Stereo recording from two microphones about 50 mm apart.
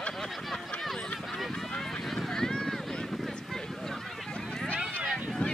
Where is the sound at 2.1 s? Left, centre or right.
Centre.